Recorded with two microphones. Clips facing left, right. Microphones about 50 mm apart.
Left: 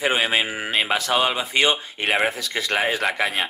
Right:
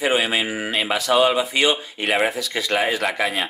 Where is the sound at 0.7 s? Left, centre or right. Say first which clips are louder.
Right 2 dB; left.